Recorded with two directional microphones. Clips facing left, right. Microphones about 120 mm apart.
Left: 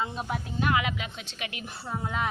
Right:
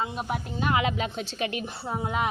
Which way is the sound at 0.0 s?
10° right (ahead or behind).